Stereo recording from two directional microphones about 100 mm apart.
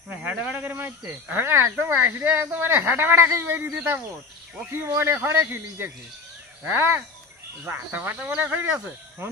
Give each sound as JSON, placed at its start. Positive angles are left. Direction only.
{"t": 0.2, "sound": "speech", "side_deg": -20}
{"t": 9.2, "sound": "speech", "side_deg": -25}